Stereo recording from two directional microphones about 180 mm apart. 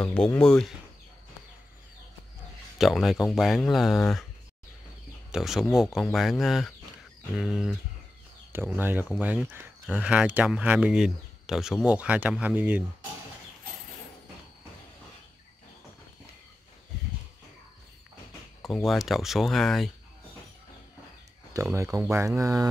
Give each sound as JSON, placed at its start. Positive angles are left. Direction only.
{"t": 0.0, "sound": "speech", "side_deg": 5}
{"t": 2.8, "sound": "speech", "side_deg": 0}
{"t": 5.3, "sound": "speech", "side_deg": 0}
{"t": 18.6, "sound": "speech", "side_deg": 0}
{"t": 21.7, "sound": "speech", "side_deg": -15}